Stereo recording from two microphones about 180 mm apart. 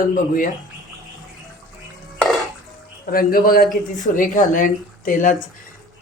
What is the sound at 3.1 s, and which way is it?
Speech, 55° left (ahead or behind).